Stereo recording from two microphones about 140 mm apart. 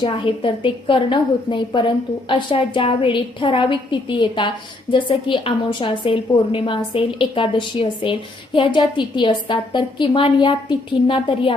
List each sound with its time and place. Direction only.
0.0 s a woman's voice: 40° left (ahead or behind)